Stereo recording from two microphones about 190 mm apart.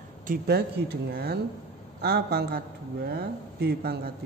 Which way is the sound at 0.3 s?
55° right (ahead or behind).